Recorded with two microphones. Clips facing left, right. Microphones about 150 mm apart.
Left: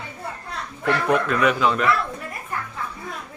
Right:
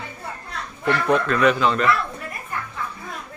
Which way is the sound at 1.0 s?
10° left (ahead or behind).